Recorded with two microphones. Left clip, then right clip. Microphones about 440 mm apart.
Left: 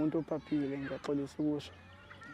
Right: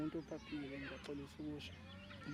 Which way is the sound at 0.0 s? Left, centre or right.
Left.